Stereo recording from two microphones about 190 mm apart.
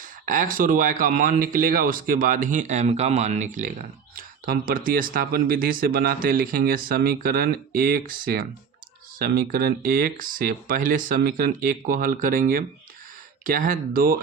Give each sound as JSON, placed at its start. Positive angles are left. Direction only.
{"t": 0.0, "sound": "speech", "side_deg": -45}